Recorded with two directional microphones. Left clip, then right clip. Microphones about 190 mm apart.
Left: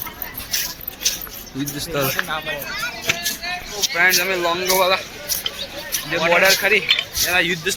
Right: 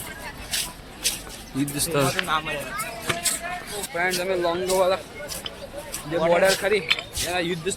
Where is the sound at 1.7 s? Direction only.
15° right (ahead or behind).